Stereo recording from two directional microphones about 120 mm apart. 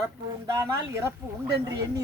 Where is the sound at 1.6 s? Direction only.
35° right (ahead or behind).